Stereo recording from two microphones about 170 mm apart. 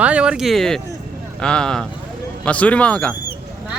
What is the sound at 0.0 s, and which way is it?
Speech, 5° right (ahead or behind).